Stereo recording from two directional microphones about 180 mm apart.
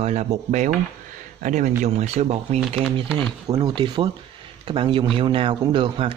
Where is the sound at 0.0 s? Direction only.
40° right (ahead or behind).